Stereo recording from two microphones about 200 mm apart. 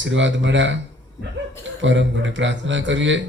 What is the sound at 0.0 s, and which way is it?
Speech, 65° right (ahead or behind).